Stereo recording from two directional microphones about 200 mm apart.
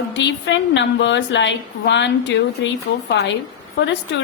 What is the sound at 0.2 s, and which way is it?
A woman's voice, 65° left (ahead or behind).